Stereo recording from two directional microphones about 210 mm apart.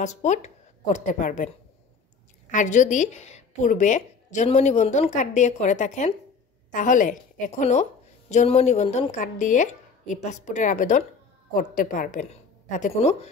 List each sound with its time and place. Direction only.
0.0 s a woman's voice: 35° left (ahead or behind)
2.5 s a woman's voice: 35° left (ahead or behind)